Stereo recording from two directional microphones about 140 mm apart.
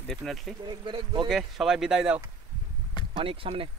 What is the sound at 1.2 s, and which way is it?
Speech, 5° right (ahead or behind).